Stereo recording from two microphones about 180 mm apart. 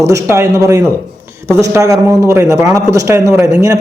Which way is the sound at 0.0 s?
15° right (ahead or behind).